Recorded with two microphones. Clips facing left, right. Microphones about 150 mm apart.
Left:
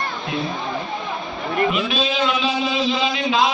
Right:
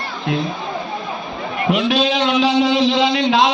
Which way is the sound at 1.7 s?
75° right (ahead or behind).